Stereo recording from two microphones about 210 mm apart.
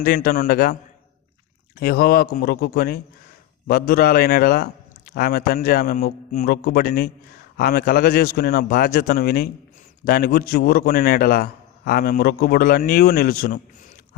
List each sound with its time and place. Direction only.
0.0 s a man's voice: 45° left (ahead or behind)
1.8 s a man's voice: 45° left (ahead or behind)